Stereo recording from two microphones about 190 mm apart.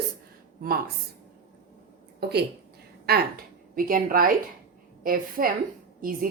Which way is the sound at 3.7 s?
50° right (ahead or behind).